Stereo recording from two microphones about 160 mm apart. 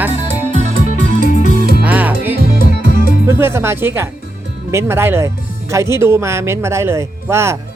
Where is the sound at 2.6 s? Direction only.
65° left (ahead or behind).